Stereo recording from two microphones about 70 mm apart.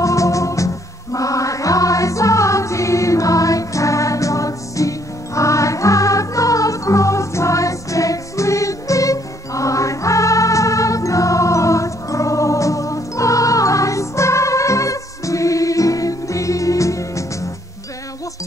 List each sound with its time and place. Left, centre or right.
0.0 s music: left